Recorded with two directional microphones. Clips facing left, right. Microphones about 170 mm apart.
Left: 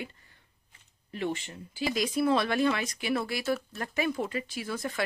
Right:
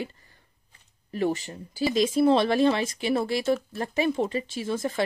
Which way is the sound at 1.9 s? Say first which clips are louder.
Right 6 dB; 25° right (ahead or behind).